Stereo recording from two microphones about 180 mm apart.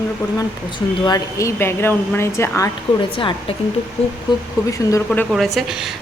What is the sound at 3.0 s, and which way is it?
Speech, 30° left (ahead or behind).